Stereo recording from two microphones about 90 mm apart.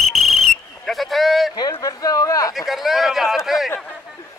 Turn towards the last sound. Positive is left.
turn(degrees=0)  # may be behind; listen again after turning